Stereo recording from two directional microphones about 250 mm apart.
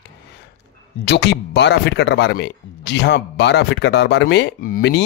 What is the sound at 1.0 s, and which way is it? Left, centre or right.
Speech, left.